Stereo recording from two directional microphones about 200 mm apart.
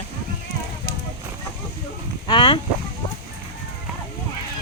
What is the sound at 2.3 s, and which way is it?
Speech, 25° left (ahead or behind).